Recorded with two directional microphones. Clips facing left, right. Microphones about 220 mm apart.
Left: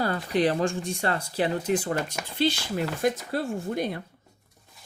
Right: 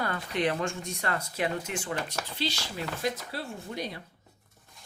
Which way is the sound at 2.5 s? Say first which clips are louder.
Left 8 dB; 55° left (ahead or behind).